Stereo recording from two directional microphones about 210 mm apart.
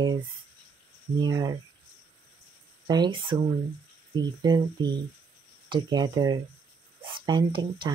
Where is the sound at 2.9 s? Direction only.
20° right (ahead or behind).